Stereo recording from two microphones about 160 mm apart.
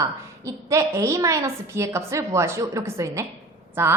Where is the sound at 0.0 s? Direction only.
20° right (ahead or behind).